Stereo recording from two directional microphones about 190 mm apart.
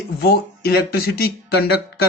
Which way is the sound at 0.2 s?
55° left (ahead or behind).